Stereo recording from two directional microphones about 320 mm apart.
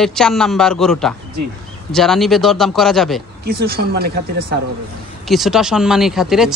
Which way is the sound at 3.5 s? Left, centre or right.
Right.